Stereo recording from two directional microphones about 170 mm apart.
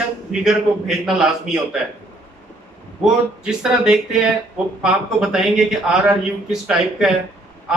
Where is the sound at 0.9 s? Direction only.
5° right (ahead or behind).